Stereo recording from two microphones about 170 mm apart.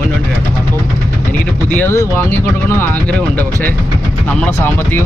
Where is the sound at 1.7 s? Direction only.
10° left (ahead or behind).